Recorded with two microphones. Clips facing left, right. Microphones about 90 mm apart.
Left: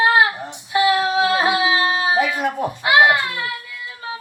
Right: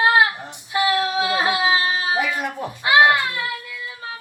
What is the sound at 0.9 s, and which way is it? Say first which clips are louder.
Speech: left 3 dB; 25° left (ahead or behind).